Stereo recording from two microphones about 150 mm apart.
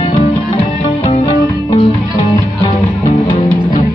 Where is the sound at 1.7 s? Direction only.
35° left (ahead or behind).